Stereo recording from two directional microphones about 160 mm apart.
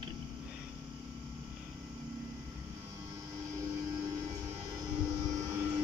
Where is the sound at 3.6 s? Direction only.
20° right (ahead or behind).